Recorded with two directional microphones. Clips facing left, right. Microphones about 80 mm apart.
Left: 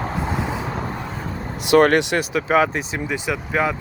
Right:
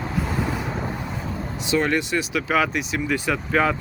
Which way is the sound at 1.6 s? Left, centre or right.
Left.